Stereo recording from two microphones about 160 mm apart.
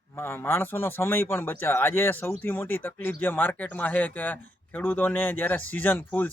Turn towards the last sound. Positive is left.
turn(degrees=10)  # may be behind; listen again after turning